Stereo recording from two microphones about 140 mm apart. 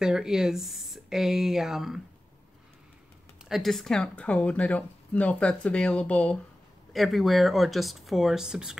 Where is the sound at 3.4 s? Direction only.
Centre (ahead or behind).